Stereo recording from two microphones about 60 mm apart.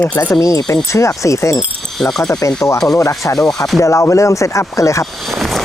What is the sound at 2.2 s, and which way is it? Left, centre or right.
Speech, left.